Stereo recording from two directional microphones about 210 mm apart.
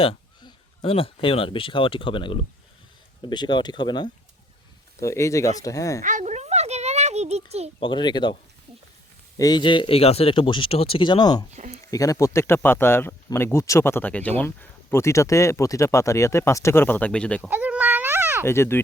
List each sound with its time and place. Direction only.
0.0 s speech: 25° left (ahead or behind)
6.0 s a sound: 35° right (ahead or behind)
7.8 s speech: 25° left (ahead or behind)
9.4 s speech: 20° left (ahead or behind)
11.5 s speech: 35° right (ahead or behind)
11.9 s speech: 15° left (ahead or behind)
17.5 s cat: 5° right (ahead or behind)
18.4 s speech: 10° left (ahead or behind)